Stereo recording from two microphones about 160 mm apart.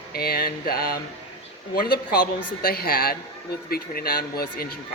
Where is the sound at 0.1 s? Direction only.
70° left (ahead or behind).